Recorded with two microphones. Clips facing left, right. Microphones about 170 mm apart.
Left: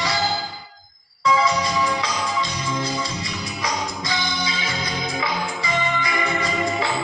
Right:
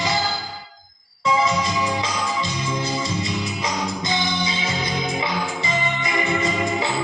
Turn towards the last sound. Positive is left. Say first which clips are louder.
# right 1 dB
turn(degrees=-25)  # may be behind; listen again after turning